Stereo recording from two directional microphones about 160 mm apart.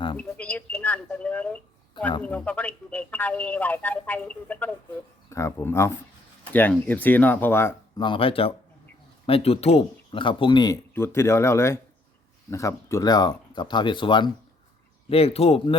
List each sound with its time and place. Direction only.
0.2 s speech: 10° left (ahead or behind)
8.0 s speech: 35° left (ahead or behind)
10.9 s speech: 15° left (ahead or behind); by 15.7 s 35° left (ahead or behind)